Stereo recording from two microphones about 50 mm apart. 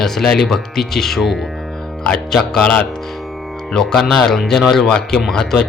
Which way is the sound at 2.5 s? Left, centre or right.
Left.